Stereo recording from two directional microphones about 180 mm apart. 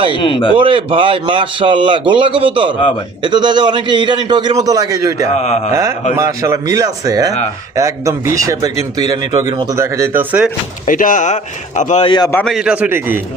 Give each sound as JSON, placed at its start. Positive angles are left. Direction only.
{"t": 0.1, "sound": "speech", "side_deg": 30}
{"t": 0.5, "sound": "a man's voice", "side_deg": -30}
{"t": 5.3, "sound": "speech", "side_deg": 40}
{"t": 6.1, "sound": "a man's voice", "side_deg": -15}
{"t": 10.8, "sound": "speech", "side_deg": 50}
{"t": 12.3, "sound": "a man's voice", "side_deg": 10}
{"t": 12.5, "sound": "speech", "side_deg": -5}